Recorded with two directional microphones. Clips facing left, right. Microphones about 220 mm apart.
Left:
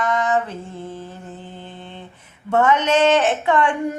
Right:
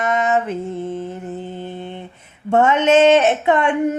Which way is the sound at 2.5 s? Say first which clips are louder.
Right 3 dB; 25° right (ahead or behind).